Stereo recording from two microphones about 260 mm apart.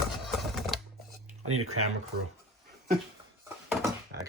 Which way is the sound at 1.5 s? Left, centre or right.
Right.